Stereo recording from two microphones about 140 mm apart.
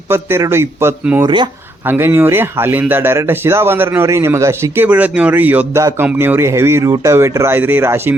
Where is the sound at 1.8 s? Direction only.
15° right (ahead or behind).